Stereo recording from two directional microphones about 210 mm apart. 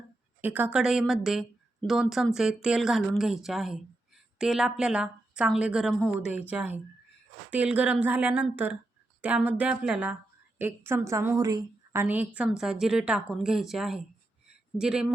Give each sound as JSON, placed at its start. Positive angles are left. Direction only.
{"t": 0.4, "sound": "a woman's voice", "side_deg": -10}